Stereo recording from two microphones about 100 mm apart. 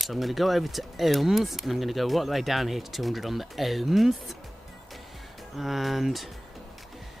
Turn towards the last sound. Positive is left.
turn(degrees=0)  # may be behind; listen again after turning